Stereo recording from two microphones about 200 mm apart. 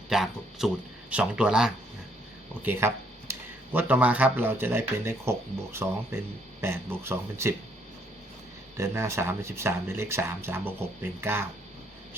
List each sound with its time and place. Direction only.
0.1 s speech: centre (ahead or behind)
8.8 s speech: 15° right (ahead or behind)